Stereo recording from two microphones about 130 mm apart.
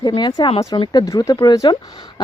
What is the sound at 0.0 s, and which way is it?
Speech, 35° left (ahead or behind).